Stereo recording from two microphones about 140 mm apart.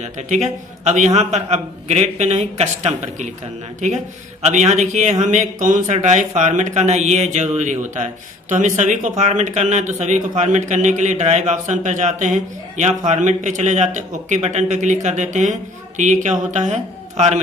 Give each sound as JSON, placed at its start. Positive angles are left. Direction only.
{"t": 0.0, "sound": "a man's voice", "side_deg": -55}